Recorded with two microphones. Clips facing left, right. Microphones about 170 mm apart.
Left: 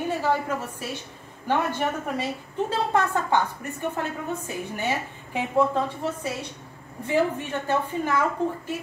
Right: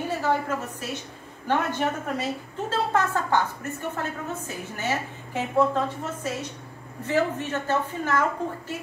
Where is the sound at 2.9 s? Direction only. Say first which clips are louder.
Even; 15° left (ahead or behind).